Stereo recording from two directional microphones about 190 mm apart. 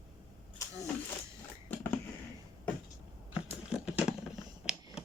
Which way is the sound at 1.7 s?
10° left (ahead or behind).